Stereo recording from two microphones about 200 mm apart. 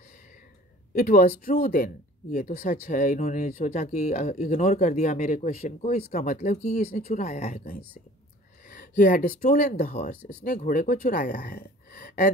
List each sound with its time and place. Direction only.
0.9 s speech: 45° left (ahead or behind)